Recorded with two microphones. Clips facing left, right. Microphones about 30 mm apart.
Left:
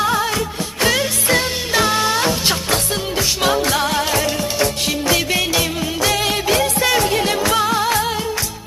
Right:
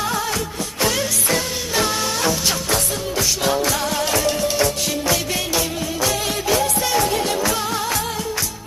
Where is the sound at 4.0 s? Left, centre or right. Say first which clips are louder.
Left 1 dB; left.